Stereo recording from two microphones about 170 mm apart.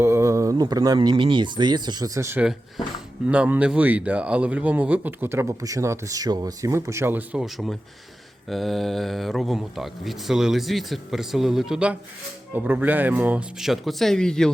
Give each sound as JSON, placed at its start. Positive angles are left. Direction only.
{"t": 0.0, "sound": "a man's voice", "side_deg": -15}